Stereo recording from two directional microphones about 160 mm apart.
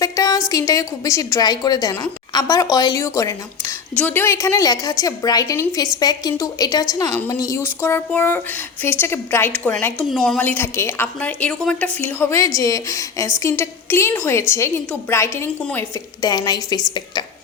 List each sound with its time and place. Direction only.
0.0 s a woman's voice: 20° left (ahead or behind)
16.3 s a woman's voice: 25° left (ahead or behind)